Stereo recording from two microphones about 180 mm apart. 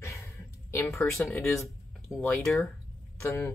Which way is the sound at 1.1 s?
Centre (ahead or behind).